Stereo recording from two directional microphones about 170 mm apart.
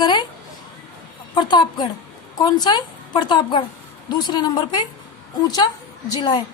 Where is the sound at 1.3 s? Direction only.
25° left (ahead or behind).